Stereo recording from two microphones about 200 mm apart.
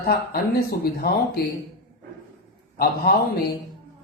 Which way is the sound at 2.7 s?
50° left (ahead or behind).